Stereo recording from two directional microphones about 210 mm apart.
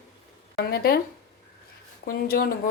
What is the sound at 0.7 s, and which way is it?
Speech, 45° left (ahead or behind).